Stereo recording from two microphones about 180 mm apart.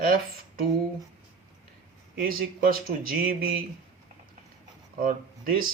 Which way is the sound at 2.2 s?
55° right (ahead or behind).